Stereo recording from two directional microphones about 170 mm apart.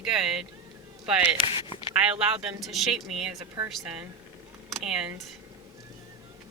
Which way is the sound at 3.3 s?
20° right (ahead or behind).